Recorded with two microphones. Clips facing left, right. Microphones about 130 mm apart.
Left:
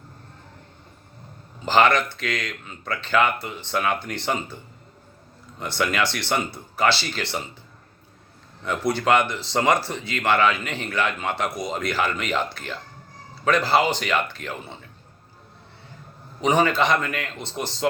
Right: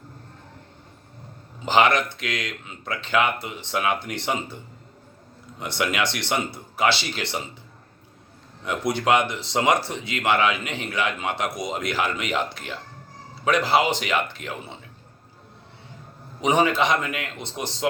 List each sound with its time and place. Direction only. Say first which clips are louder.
1.6 s a man's voice: left 1 dB; 20° right (ahead or behind)
5.5 s a man's voice: left 1 dB; 20° right (ahead or behind)
8.6 s a man's voice: left 1 dB; 20° right (ahead or behind)
14.0 s a man's voice: left 1 dB; 20° right (ahead or behind)
16.4 s a man's voice: even; 20° right (ahead or behind)